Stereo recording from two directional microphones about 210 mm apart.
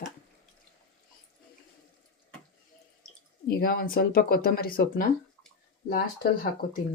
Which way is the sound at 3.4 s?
45° left (ahead or behind).